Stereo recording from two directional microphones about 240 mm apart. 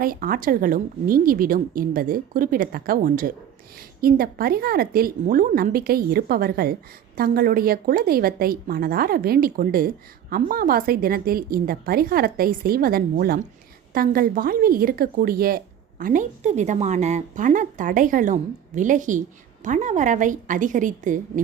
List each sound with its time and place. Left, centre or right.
0.0 s a woman's voice: right